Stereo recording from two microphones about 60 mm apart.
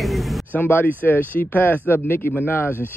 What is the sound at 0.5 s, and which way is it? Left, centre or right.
A man's voice, left.